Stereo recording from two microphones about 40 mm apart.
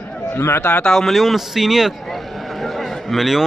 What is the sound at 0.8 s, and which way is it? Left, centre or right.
Speech, centre.